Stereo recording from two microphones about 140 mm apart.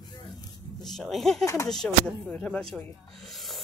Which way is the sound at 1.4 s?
20° left (ahead or behind).